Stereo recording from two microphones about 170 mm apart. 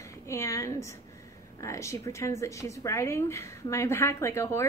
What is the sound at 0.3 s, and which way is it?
A woman's voice, 15° left (ahead or behind).